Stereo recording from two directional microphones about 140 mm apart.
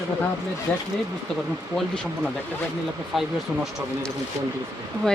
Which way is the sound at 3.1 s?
Centre (ahead or behind).